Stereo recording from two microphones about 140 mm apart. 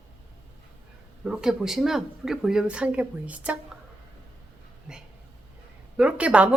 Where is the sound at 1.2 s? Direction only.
5° right (ahead or behind).